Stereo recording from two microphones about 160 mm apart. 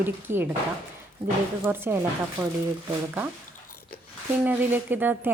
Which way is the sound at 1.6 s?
15° right (ahead or behind).